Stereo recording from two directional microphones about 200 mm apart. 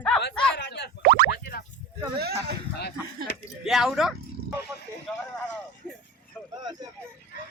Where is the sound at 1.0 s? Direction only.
50° right (ahead or behind).